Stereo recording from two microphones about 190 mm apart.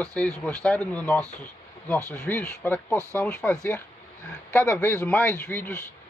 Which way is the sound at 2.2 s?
10° left (ahead or behind).